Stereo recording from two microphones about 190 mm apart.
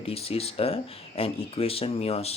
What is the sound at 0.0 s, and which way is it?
Speech, 30° left (ahead or behind).